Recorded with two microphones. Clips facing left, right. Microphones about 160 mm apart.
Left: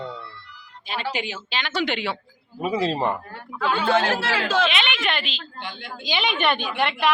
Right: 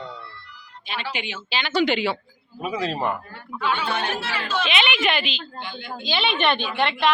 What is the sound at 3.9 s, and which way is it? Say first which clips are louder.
Speech: left 5 dB; 90° left.